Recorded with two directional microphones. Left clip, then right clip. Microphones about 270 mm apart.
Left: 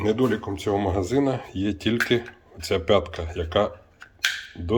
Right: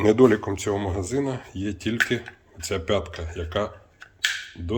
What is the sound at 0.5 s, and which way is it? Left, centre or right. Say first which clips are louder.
Speech: left 2 dB; centre.